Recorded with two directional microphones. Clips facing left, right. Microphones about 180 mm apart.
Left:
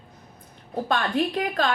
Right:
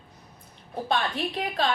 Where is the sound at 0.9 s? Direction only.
45° left (ahead or behind).